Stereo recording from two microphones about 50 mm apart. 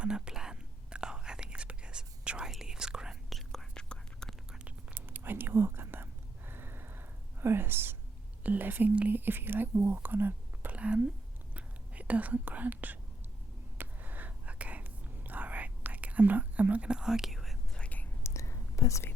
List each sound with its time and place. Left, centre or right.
0.0 s whispering: centre
3.2 s whispering: centre
4.9 s whispering: right
7.4 s speech: right
8.9 s speech: right
9.1 s speech: right
10.7 s a woman's voice: right
13.7 s whispering: right
16.9 s whispering: centre
17.7 s whispering: left
18.2 s whispering: left